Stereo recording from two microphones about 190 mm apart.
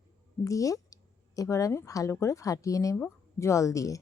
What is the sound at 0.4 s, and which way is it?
Speech, 15° left (ahead or behind).